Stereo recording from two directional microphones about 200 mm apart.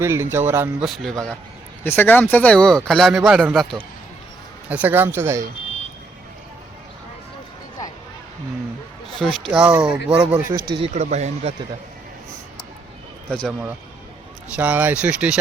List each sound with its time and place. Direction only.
0.0 s speech: 10° right (ahead or behind)
0.9 s speech: centre (ahead or behind)
4.7 s speech: 10° right (ahead or behind)
9.1 s speech: centre (ahead or behind)
10.8 s speech: 30° right (ahead or behind)
14.5 s speech: 5° right (ahead or behind)